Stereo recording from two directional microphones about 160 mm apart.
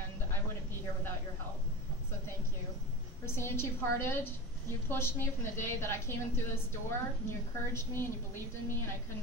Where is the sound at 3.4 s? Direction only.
15° left (ahead or behind).